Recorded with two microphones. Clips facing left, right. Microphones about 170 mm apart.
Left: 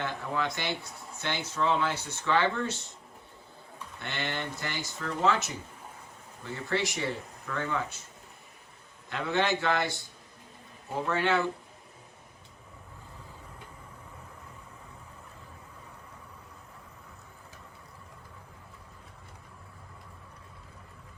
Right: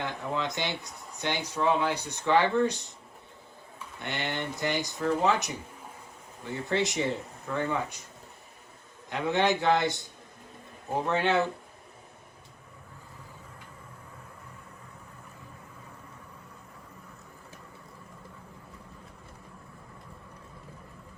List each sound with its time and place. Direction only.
0.0 s speech: 20° right (ahead or behind)
4.0 s speech: 15° right (ahead or behind)
9.0 s speech: 15° right (ahead or behind)